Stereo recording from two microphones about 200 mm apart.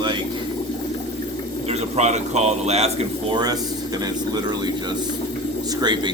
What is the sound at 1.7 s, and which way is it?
Speech, 35° right (ahead or behind).